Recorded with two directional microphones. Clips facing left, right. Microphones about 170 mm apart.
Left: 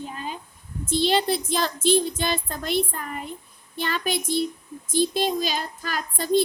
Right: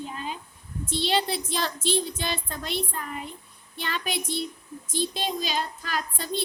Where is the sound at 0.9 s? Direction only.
45° left (ahead or behind).